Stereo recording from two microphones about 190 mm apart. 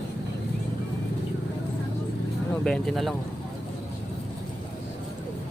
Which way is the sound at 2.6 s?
5° left (ahead or behind).